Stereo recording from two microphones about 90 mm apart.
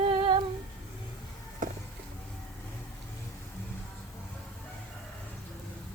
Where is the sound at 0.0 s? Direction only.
70° right (ahead or behind).